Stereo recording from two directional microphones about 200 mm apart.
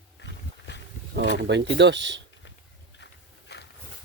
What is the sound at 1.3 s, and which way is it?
Speech, 60° right (ahead or behind).